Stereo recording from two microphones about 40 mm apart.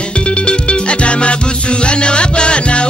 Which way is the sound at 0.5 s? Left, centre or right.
Left.